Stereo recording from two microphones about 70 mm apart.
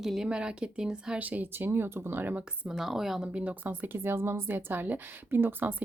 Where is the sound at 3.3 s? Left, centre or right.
Right.